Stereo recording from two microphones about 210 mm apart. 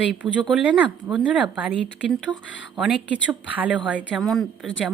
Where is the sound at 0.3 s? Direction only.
5° right (ahead or behind).